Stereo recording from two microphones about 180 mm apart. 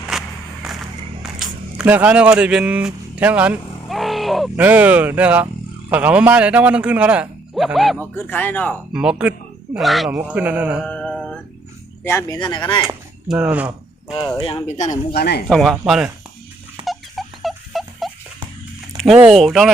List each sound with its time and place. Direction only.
0.1 s music: centre (ahead or behind)
1.2 s speech: 5° right (ahead or behind)
8.1 s speech: 10° left (ahead or behind)
8.9 s speech: 5° right (ahead or behind)
10.8 s mantra: 5° left (ahead or behind)
12.0 s speech: 15° left (ahead or behind)
13.2 s speech: 5° right (ahead or behind)
14.4 s speech: 35° left (ahead or behind)
15.1 s speech: 65° left (ahead or behind)
15.4 s speech: centre (ahead or behind)
16.8 s a sound: centre (ahead or behind)
18.9 s speech: 5° right (ahead or behind)